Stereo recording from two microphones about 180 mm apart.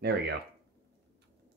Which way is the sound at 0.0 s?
65° right (ahead or behind).